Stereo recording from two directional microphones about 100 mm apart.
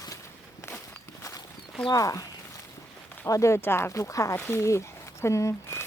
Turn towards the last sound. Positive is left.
turn(degrees=30)  # may be behind; listen again after turning